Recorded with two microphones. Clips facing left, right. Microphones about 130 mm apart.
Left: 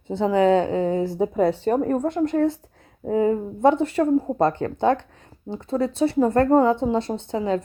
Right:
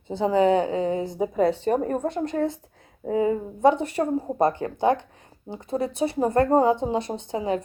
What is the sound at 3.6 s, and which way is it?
Speech, 15° right (ahead or behind).